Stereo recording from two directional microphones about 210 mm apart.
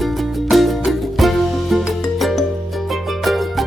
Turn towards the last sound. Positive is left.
turn(degrees=0)  # may be behind; listen again after turning